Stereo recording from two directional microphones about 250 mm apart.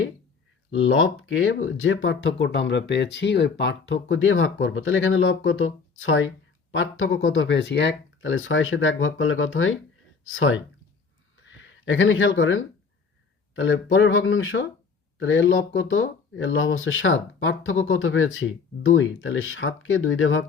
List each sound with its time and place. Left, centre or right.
0.7 s speech: left
11.3 s a sound: left
13.5 s speech: left